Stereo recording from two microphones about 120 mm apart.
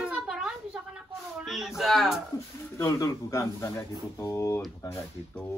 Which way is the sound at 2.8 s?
25° left (ahead or behind).